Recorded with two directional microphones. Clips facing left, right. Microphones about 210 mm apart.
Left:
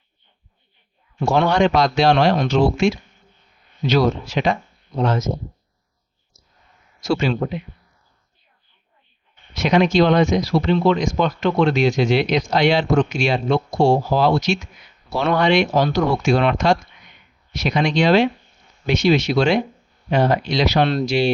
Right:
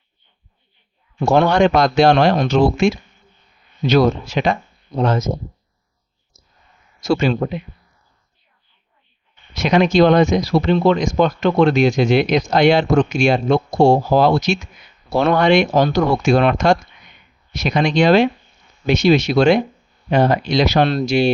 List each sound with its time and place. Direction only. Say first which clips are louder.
1.3 s speech: right 3 dB; 50° right (ahead or behind)
7.0 s speech: right 3 dB; 45° right (ahead or behind)
9.7 s speech: right 3 dB; 50° right (ahead or behind)